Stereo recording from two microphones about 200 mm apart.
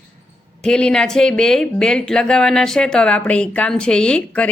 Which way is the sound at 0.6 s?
5° left (ahead or behind).